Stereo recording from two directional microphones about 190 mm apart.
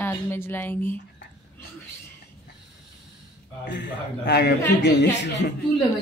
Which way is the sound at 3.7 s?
65° left (ahead or behind).